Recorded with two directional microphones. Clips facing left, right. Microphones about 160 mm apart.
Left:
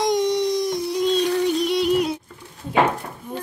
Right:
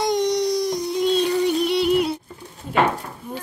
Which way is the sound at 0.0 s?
Centre (ahead or behind).